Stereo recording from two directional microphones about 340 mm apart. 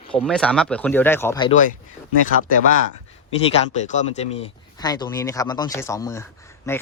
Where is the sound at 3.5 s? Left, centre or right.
Centre.